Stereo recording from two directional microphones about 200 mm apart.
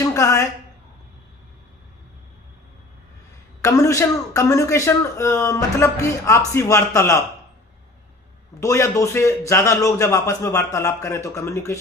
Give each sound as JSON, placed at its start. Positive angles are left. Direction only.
{"t": 0.0, "sound": "a sound", "side_deg": 15}
{"t": 3.6, "sound": "a man's voice", "side_deg": 15}
{"t": 8.6, "sound": "a man's voice", "side_deg": 15}